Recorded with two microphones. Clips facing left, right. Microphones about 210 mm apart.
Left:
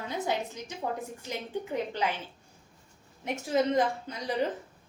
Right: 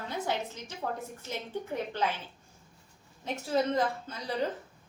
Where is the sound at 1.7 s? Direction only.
15° left (ahead or behind).